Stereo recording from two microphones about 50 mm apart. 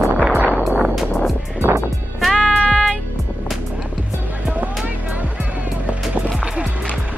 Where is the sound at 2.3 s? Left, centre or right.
Centre.